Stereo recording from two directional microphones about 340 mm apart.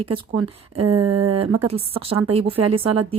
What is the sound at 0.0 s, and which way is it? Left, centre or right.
Speech, right.